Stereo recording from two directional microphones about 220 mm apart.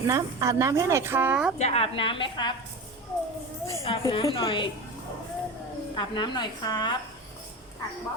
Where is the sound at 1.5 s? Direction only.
30° left (ahead or behind).